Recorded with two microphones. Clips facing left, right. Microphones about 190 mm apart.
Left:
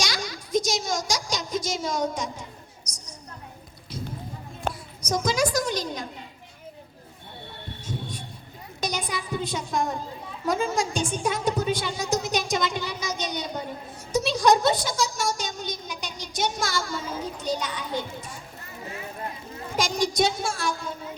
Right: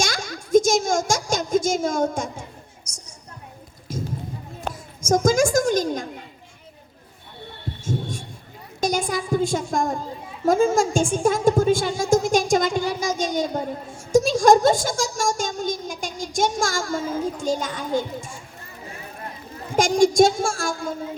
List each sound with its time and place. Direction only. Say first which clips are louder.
0.0 s a child's voice: right 4 dB; 50° right (ahead or behind)
2.8 s a sound: left 1 dB; 25° right (ahead or behind)
3.9 s clip-clop: right 6 dB; 45° right (ahead or behind)
4.7 s a woman's voice: right 10 dB; 45° right (ahead or behind)
7.9 s heart sounds: right 7 dB; 45° right (ahead or behind)
8.8 s a woman's voice: right 7 dB; 45° right (ahead or behind)
19.7 s a woman's voice: right 9 dB; 50° right (ahead or behind)